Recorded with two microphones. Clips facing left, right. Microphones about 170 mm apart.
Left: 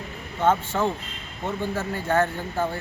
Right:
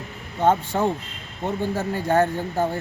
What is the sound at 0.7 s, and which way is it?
Speech, 30° right (ahead or behind).